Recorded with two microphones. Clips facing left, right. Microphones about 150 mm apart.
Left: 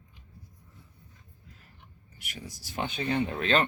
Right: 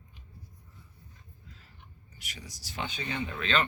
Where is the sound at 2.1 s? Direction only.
55° left (ahead or behind).